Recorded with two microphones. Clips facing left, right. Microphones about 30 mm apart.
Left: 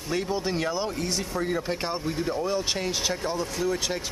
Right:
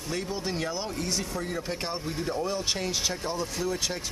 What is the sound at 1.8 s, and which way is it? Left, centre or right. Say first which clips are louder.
Speech: left 3 dB; centre.